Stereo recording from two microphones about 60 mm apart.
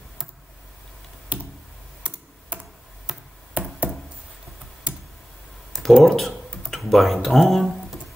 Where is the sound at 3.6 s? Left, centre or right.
Right.